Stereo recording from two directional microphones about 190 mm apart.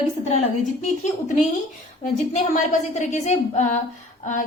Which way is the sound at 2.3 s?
40° left (ahead or behind).